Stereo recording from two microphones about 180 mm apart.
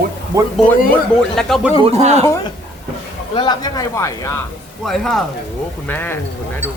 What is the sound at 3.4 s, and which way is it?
Speech, 20° left (ahead or behind).